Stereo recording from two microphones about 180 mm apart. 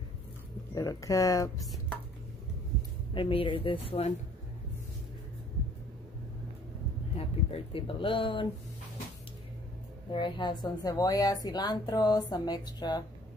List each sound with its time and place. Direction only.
0.7 s a woman's voice: 20° left (ahead or behind)
1.6 s a sound: centre (ahead or behind)
3.2 s a woman's voice: 30° left (ahead or behind)
7.2 s a woman's voice: 30° left (ahead or behind)
10.1 s a woman's voice: 25° left (ahead or behind)